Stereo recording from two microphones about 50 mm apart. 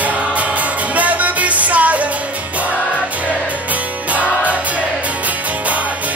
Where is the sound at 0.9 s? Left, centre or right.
Right.